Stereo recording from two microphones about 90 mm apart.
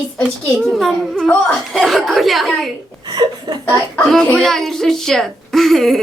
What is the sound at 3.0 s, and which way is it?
Speech, 50° right (ahead or behind).